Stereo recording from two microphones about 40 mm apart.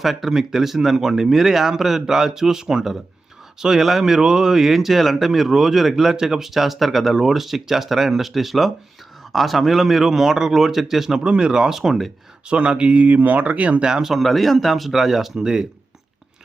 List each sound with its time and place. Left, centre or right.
0.0 s speech: centre
11.2 s speech: right
12.5 s speech: right
13.8 s speech: centre